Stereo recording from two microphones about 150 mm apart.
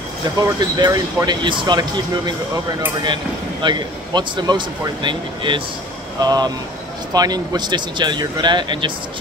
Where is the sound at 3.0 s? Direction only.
30° right (ahead or behind).